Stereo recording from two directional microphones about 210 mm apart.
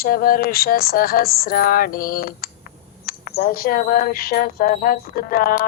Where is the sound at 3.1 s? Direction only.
45° left (ahead or behind).